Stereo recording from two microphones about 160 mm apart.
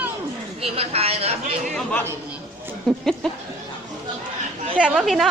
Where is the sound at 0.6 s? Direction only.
40° right (ahead or behind).